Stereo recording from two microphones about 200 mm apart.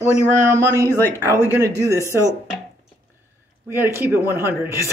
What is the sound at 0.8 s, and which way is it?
Speech, 10° left (ahead or behind).